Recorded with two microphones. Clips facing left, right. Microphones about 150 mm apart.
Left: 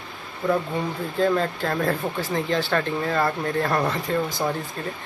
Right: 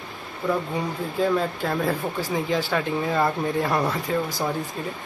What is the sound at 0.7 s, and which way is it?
Speech, 5° right (ahead or behind).